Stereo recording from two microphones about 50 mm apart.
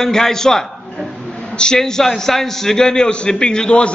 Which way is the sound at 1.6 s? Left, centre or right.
Centre.